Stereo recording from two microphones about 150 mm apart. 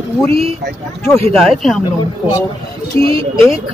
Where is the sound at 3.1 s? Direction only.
35° right (ahead or behind).